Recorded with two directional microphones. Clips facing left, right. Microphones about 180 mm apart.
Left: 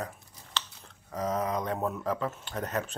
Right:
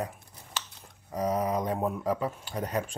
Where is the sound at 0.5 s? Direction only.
15° right (ahead or behind).